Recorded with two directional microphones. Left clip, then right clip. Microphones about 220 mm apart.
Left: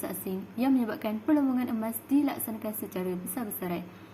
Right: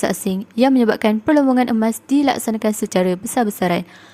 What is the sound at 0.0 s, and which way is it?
A woman's voice, 45° right (ahead or behind).